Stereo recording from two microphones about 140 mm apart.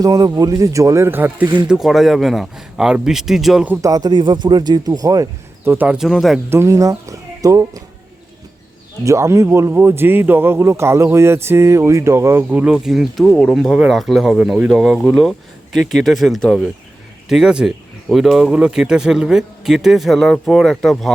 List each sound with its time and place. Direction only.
0.0 s speech: 25° right (ahead or behind)
1.6 s speech: 5° right (ahead or behind)
3.8 s speech: 25° right (ahead or behind)
5.7 s speech: 10° right (ahead or behind)
6.1 s speech: centre (ahead or behind)
6.5 s speech: 20° right (ahead or behind)
9.0 s a man's voice: 20° right (ahead or behind); by 21.1 s centre (ahead or behind)